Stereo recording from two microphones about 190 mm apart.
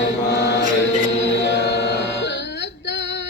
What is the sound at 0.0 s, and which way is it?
Chant, 65° left (ahead or behind).